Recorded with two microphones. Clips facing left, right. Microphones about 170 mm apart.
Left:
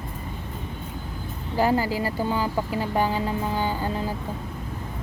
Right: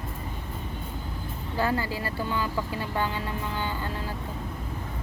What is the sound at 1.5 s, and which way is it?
Speech, 15° left (ahead or behind).